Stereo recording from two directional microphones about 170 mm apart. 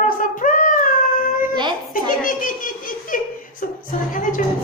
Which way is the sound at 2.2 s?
50° left (ahead or behind).